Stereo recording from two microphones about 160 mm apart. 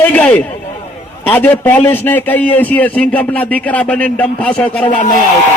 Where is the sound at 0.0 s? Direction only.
10° left (ahead or behind).